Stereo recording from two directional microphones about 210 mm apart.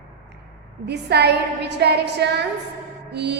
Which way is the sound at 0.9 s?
50° right (ahead or behind).